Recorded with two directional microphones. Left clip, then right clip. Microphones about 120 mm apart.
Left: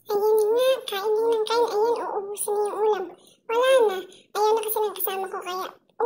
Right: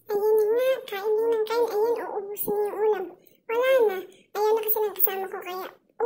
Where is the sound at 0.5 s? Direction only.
40° right (ahead or behind).